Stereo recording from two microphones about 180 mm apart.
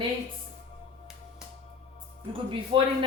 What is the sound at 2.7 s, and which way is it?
Speech, 30° right (ahead or behind).